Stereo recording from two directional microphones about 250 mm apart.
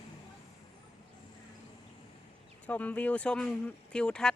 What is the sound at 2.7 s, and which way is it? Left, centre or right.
Speech, centre.